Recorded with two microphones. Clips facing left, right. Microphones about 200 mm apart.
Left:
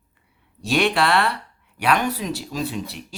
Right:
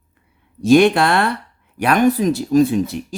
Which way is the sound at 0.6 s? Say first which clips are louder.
Right 9 dB; 45° right (ahead or behind).